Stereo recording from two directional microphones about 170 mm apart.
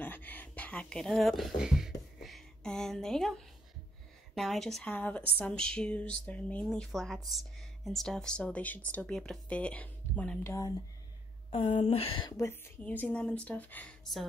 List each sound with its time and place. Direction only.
0.0 s a sound: 10° left (ahead or behind)
4.4 s a woman's voice: centre (ahead or behind)
11.5 s speech: 35° left (ahead or behind)
12.4 s a woman's voice: 15° left (ahead or behind)